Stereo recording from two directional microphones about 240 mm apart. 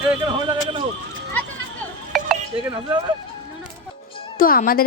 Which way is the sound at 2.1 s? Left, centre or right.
Centre.